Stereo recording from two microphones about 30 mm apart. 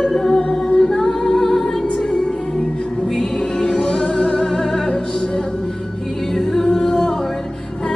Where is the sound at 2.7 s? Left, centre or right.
Left.